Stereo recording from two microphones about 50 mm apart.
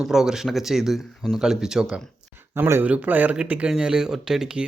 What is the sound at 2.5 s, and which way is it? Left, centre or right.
Speech, right.